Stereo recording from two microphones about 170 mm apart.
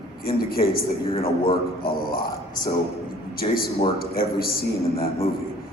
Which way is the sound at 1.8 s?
60° left (ahead or behind).